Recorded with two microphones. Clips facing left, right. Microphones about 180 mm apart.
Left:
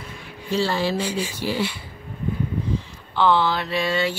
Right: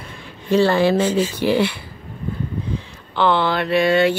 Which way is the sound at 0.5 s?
60° right (ahead or behind).